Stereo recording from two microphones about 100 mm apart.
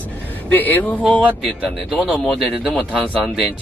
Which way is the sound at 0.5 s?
15° left (ahead or behind).